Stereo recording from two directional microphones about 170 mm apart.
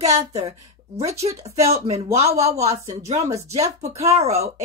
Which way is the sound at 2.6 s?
20° right (ahead or behind).